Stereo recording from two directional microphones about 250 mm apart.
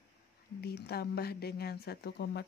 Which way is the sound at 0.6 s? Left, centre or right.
Left.